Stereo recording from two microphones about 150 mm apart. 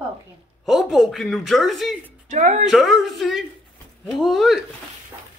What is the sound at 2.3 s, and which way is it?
Speech, 55° right (ahead or behind).